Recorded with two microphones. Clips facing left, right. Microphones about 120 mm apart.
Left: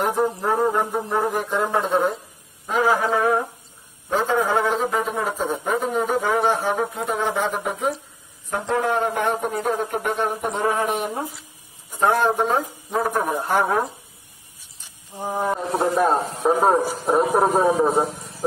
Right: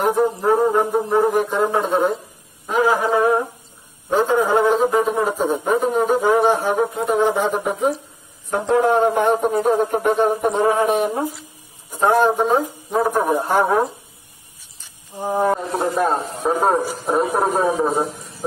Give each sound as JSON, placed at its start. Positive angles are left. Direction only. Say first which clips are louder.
{"t": 0.0, "sound": "music", "louder": "right 4 dB", "side_deg": -15}
{"t": 4.6, "sound": "music", "louder": "right 6 dB", "side_deg": -20}
{"t": 7.5, "sound": "speech", "louder": "right 4 dB", "side_deg": -25}
{"t": 12.0, "sound": "music", "louder": "right 3 dB", "side_deg": -15}
{"t": 12.3, "sound": "speech", "louder": "right 3 dB", "side_deg": -10}
{"t": 15.1, "sound": "music", "louder": "right 5 dB", "side_deg": -10}
{"t": 15.8, "sound": "a man's voice", "louder": "left 3 dB", "side_deg": 5}